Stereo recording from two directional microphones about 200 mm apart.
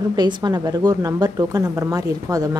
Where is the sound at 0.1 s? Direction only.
20° right (ahead or behind).